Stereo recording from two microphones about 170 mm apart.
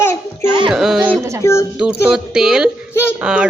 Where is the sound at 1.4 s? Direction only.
15° left (ahead or behind).